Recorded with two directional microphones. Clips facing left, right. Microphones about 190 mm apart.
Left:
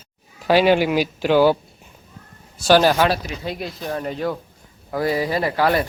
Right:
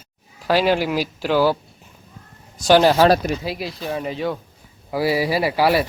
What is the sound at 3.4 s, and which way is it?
A man's voice, 5° right (ahead or behind).